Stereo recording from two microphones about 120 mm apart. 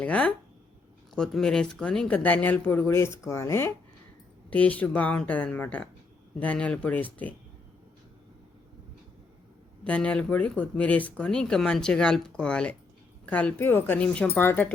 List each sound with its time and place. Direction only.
0.0 s speech: 10° left (ahead or behind)
9.8 s speech: 10° left (ahead or behind)